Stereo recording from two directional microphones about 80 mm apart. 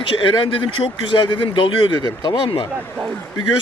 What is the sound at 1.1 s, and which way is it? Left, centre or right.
Speech, left.